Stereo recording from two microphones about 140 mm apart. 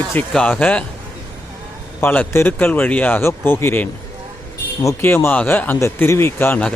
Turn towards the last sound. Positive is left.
turn(degrees=10)  # may be behind; listen again after turning